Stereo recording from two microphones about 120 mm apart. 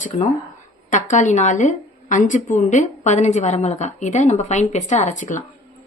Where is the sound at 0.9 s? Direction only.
90° left.